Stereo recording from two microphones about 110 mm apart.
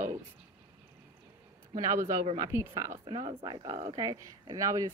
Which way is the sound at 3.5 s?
40° right (ahead or behind).